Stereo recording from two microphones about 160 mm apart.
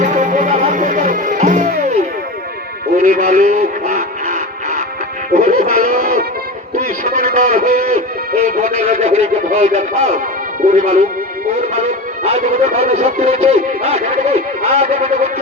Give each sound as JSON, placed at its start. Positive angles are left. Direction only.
{"t": 0.0, "sound": "music", "side_deg": -50}
{"t": 3.0, "sound": "music", "side_deg": -60}
{"t": 10.7, "sound": "speech", "side_deg": -55}
{"t": 11.7, "sound": "music", "side_deg": -40}
{"t": 13.2, "sound": "speech", "side_deg": -40}